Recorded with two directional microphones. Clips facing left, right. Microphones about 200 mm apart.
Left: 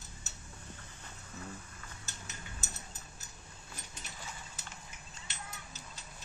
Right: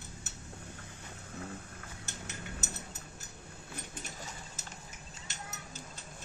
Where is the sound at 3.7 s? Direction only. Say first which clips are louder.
Right 6 dB; 50° right (ahead or behind).